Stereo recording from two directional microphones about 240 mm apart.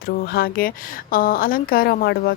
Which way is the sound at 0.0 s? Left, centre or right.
Left.